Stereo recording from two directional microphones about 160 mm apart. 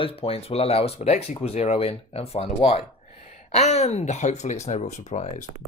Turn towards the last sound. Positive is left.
turn(degrees=45)  # may be behind; listen again after turning